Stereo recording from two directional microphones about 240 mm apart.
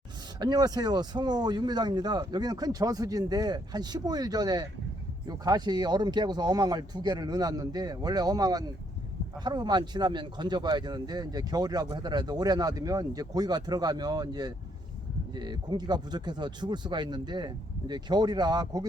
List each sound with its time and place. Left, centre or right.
0.3 s speech: centre